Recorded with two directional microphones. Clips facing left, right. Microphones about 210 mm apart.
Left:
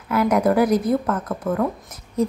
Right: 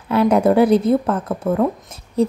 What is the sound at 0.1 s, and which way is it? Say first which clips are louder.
A woman's voice: right 4 dB; 30° right (ahead or behind).